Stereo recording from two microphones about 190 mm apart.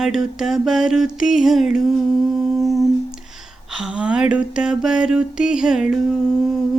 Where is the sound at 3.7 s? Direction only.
5° right (ahead or behind).